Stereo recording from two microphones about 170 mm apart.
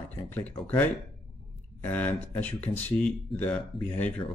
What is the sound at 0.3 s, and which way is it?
Speech, 10° left (ahead or behind).